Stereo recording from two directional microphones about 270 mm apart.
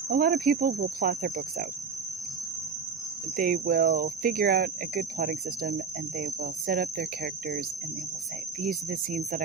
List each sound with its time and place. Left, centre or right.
0.1 s speech: right
3.3 s speech: right
8.6 s speech: right